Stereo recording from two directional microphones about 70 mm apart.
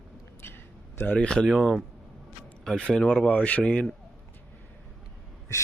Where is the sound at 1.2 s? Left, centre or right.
Centre.